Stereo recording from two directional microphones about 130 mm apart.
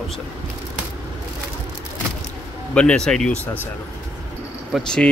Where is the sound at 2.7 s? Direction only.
5° left (ahead or behind).